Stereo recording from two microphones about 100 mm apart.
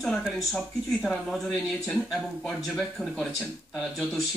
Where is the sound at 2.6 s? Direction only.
Centre (ahead or behind).